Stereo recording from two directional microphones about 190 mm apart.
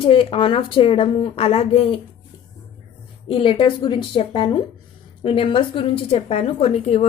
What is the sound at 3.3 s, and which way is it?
A woman's voice, 30° left (ahead or behind).